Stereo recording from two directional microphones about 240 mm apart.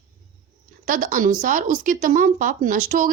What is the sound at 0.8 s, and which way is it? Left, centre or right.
A woman's voice, right.